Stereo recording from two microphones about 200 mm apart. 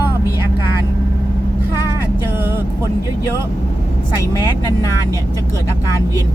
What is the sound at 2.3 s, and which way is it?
Vehicle, 10° right (ahead or behind).